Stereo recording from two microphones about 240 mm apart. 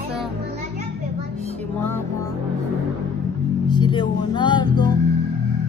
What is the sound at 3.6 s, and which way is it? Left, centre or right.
Speech, centre.